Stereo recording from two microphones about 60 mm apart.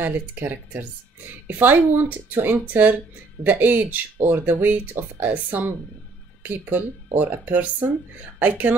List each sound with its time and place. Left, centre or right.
0.0 s a woman's voice: right